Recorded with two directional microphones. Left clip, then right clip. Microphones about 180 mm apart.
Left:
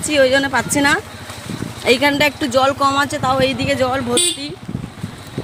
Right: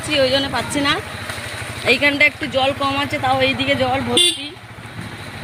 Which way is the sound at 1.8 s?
35° left (ahead or behind).